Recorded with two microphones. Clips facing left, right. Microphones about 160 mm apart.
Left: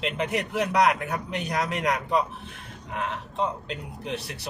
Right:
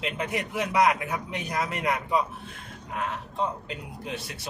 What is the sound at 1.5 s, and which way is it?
Speech, 70° left (ahead or behind).